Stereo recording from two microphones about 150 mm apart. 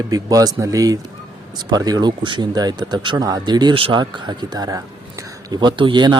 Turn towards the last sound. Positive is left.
turn(degrees=-30)  # may be behind; listen again after turning